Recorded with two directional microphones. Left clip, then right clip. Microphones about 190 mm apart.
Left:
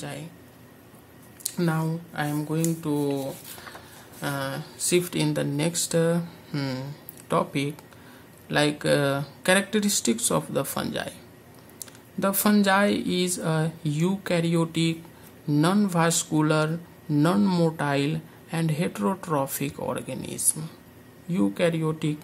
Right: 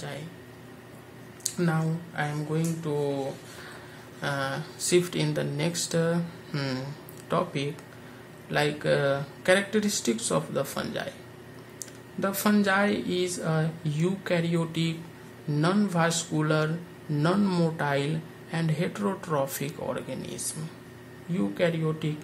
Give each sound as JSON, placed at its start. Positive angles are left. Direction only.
{"t": 1.4, "sound": "speech", "side_deg": 30}
{"t": 4.2, "sound": "speech", "side_deg": 20}
{"t": 12.2, "sound": "speech", "side_deg": 30}